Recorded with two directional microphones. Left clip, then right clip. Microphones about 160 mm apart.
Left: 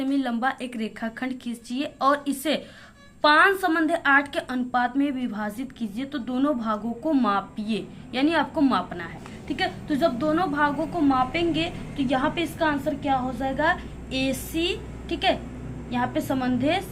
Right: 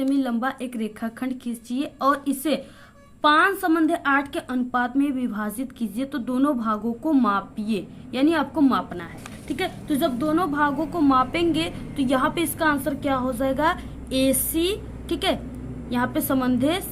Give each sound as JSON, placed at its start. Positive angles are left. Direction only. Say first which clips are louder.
{"t": 0.0, "sound": "a woman's voice", "louder": "right 1 dB", "side_deg": -20}
{"t": 9.5, "sound": "a woman's voice", "louder": "even", "side_deg": -35}
{"t": 11.1, "sound": "a woman's voice", "louder": "right 4 dB", "side_deg": -45}